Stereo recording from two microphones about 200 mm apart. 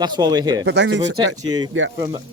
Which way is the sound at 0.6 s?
60° right (ahead or behind).